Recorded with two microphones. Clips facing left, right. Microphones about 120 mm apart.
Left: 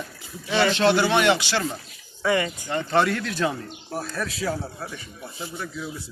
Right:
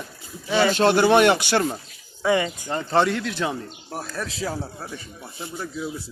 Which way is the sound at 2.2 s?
15° right (ahead or behind).